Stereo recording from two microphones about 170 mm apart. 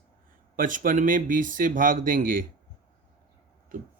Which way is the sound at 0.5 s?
55° right (ahead or behind).